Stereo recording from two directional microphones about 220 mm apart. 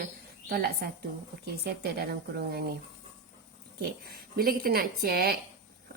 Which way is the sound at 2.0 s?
45° right (ahead or behind).